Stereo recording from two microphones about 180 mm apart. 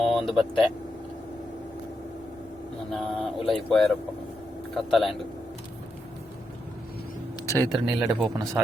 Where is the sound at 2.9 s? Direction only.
Centre (ahead or behind).